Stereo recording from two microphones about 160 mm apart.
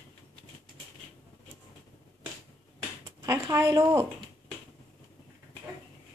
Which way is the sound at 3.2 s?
20° right (ahead or behind).